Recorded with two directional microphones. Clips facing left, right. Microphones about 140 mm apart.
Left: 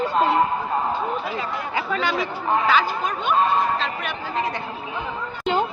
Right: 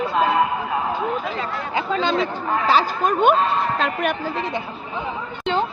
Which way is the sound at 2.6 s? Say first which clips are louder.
Right 2 dB; 40° right (ahead or behind).